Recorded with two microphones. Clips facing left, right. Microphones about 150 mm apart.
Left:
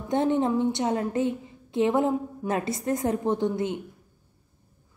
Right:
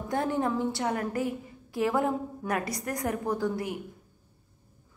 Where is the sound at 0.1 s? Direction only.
20° left (ahead or behind).